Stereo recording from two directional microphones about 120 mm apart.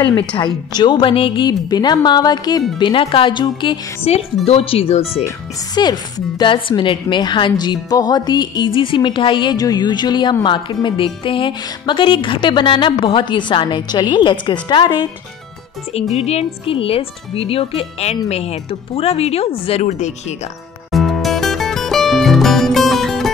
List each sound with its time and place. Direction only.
0.0 s a woman's voice: 40° left (ahead or behind)
1.5 s speech: 35° left (ahead or behind)
2.8 s a woman's voice: 45° left (ahead or behind)
4.5 s speech: 55° left (ahead or behind)
5.8 s speech: 35° left (ahead or behind)
16.2 s speech: 60° left (ahead or behind)
19.8 s speech: 75° left (ahead or behind)
20.9 s music: centre (ahead or behind)